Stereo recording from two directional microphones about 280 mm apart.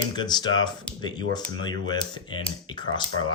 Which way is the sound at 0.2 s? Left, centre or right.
Centre.